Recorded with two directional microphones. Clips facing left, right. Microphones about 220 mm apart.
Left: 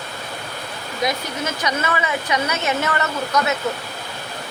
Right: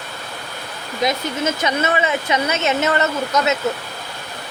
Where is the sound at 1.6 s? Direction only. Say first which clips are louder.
Right 2 dB; 25° right (ahead or behind).